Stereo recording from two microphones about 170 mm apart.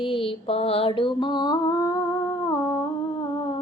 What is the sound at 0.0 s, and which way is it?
Mantra, 30° left (ahead or behind).